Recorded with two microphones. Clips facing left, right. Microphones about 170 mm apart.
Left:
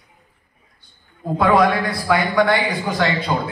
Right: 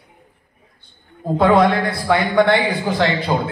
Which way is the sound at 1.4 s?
25° right (ahead or behind).